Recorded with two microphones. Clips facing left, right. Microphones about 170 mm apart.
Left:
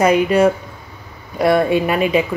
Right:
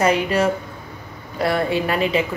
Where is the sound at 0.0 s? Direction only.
10° left (ahead or behind).